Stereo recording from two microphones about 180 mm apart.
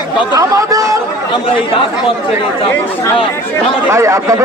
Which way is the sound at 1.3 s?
30° left (ahead or behind).